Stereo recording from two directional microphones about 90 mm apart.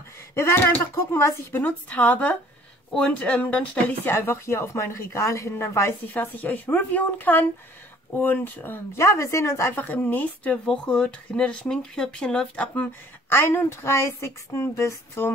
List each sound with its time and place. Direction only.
0.3 s speech: 30° left (ahead or behind)
1.6 s speech: 15° left (ahead or behind)
13.3 s speech: 25° left (ahead or behind)